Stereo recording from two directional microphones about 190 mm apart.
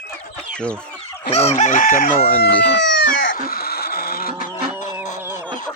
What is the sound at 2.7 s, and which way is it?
Speech, 65° left (ahead or behind).